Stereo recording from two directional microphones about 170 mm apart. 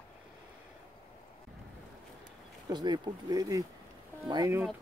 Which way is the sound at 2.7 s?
25° right (ahead or behind).